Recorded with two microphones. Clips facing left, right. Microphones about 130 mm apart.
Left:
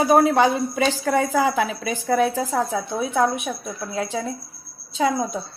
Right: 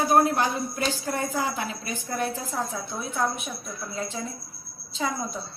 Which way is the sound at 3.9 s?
90° left.